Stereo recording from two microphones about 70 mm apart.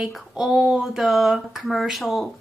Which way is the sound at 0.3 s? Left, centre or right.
Centre.